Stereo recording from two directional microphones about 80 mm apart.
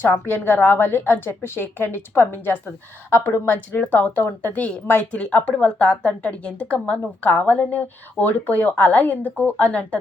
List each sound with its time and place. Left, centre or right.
0.0 s speech: left